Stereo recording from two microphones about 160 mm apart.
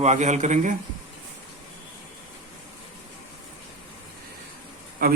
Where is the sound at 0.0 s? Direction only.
45° right (ahead or behind).